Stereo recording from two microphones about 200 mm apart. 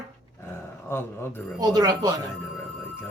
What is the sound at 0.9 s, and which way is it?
Speech, 10° left (ahead or behind).